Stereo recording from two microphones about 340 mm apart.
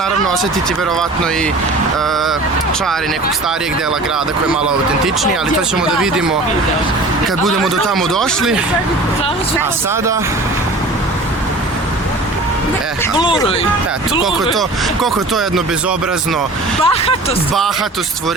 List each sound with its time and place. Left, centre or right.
5.9 s speech: centre
7.4 s speech: centre
13.1 s speech: centre
16.8 s speech: centre